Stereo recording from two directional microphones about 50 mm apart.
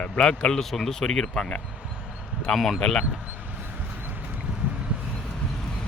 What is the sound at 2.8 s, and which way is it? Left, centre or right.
Speech, centre.